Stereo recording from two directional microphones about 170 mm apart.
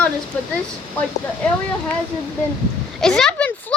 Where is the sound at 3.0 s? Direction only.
5° left (ahead or behind).